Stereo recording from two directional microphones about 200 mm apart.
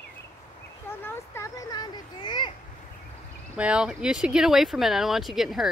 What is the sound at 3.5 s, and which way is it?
Speech, 5° right (ahead or behind).